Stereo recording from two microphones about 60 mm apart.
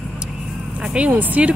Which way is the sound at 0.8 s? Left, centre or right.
Centre.